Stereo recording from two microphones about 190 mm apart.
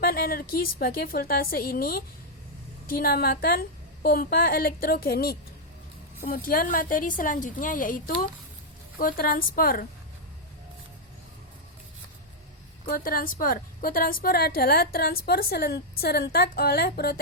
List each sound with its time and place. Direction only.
0.0 s a woman's voice: 50° left (ahead or behind)
13.0 s a woman's voice: 50° left (ahead or behind)